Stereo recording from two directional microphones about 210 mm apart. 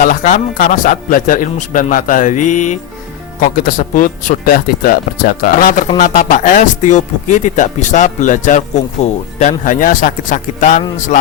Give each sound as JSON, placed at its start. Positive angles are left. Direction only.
{"t": 0.0, "sound": "speech", "side_deg": 40}
{"t": 3.8, "sound": "speech", "side_deg": 40}